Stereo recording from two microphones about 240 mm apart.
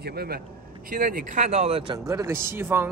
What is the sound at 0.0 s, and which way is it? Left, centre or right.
A man's voice, right.